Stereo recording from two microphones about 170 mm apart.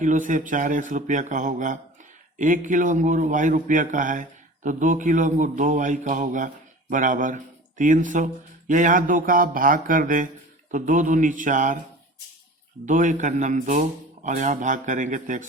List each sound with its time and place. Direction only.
0.0 s a man's voice: 50° right (ahead or behind)
12.8 s a man's voice: 50° right (ahead or behind)